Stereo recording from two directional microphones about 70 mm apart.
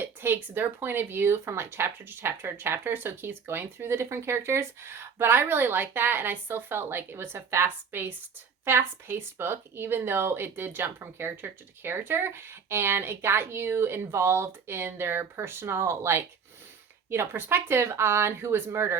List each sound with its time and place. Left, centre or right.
0.0 s speech: right